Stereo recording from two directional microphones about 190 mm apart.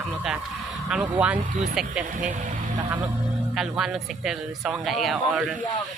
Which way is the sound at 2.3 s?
40° right (ahead or behind).